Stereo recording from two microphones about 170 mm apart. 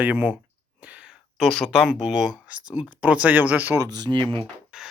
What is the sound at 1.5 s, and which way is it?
Speech, centre (ahead or behind).